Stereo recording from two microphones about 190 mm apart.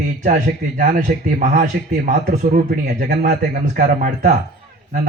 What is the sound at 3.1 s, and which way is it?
Speech, 60° right (ahead or behind).